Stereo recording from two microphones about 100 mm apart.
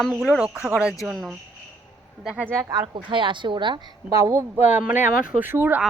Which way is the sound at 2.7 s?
45° right (ahead or behind).